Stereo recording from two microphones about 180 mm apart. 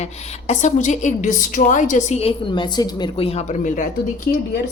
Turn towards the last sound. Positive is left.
turn(degrees=65)  # may be behind; listen again after turning